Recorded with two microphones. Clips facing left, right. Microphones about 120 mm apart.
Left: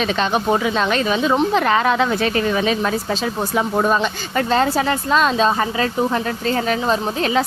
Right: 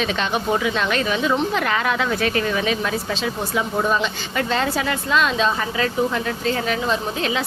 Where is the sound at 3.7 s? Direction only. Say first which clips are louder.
Left 3 dB; 45° left (ahead or behind).